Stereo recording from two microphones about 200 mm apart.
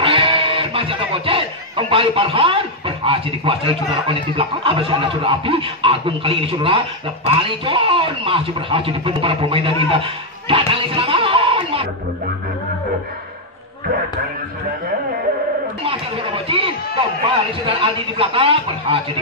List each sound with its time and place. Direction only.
0.0 s speech: 25° right (ahead or behind)
10.7 s a sound: 25° right (ahead or behind)
15.8 s music: 25° right (ahead or behind)
17.6 s speech: 25° right (ahead or behind)